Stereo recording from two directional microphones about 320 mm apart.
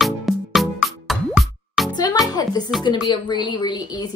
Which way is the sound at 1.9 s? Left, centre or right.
Centre.